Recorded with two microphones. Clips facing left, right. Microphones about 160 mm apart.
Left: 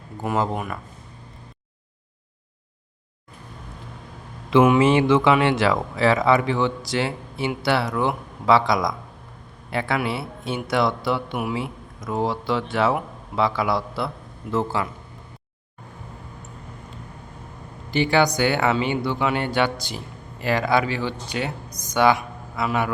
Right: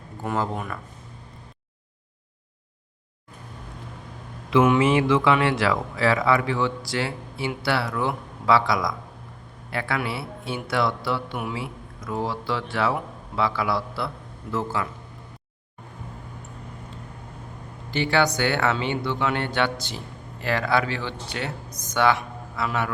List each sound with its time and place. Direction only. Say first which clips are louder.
0.2 s speech: left 3 dB; 15° left (ahead or behind)
4.8 s speech: left 3 dB; 25° left (ahead or behind)
17.9 s speech: left 3 dB; 15° left (ahead or behind)